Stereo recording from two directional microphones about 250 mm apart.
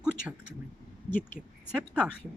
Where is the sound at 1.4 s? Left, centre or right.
Centre.